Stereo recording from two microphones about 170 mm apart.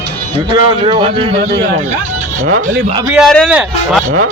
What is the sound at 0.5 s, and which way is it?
Speech, 30° right (ahead or behind).